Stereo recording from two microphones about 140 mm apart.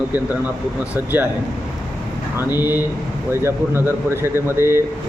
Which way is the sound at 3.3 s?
20° right (ahead or behind).